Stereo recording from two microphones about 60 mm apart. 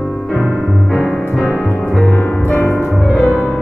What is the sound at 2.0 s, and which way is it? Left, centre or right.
Music, left.